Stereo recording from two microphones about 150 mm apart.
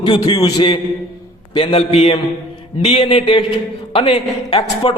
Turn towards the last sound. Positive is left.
turn(degrees=35)  # may be behind; listen again after turning